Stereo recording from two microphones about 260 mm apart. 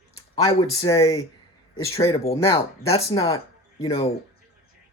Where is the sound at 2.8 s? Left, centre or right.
Left.